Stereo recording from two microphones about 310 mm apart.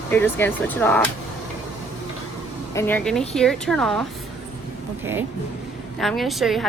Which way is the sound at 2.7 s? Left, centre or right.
Centre.